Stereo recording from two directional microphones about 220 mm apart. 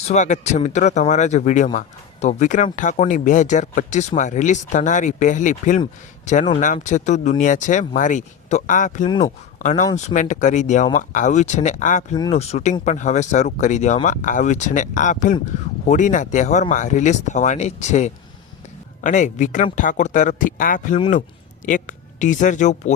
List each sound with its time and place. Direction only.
0.1 s speech: 30° left (ahead or behind)
9.0 s speech: 20° left (ahead or behind)
9.6 s speech: 35° left (ahead or behind)